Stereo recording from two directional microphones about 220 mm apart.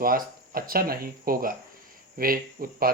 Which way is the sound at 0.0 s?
40° right (ahead or behind).